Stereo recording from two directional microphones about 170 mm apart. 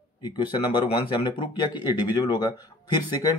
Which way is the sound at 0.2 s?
25° left (ahead or behind).